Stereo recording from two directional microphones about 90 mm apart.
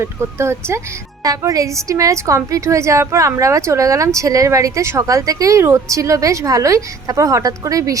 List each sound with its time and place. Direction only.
0.0 s a woman's voice: 30° right (ahead or behind)